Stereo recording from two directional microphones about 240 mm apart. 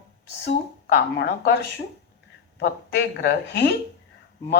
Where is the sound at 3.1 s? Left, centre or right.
Left.